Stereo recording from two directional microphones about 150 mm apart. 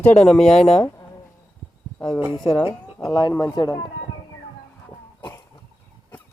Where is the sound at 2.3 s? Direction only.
30° left (ahead or behind).